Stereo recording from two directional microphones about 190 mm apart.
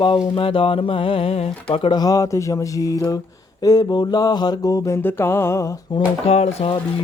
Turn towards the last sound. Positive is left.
turn(degrees=30)  # may be behind; listen again after turning